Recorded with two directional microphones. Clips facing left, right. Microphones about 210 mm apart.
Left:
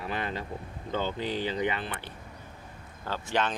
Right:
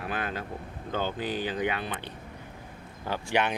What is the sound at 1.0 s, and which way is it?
Speech, 10° right (ahead or behind).